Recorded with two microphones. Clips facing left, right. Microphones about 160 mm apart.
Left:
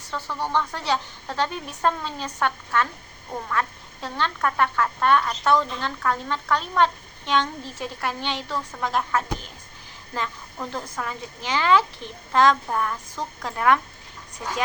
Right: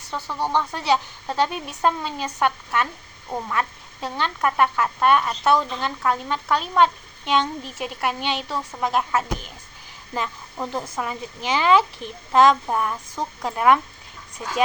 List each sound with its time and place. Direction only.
0.1 s speech: 15° right (ahead or behind)